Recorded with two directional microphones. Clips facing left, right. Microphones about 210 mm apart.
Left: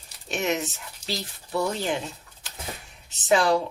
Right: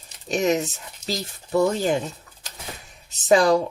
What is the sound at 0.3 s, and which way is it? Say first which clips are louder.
Speech: right 5 dB; 40° right (ahead or behind).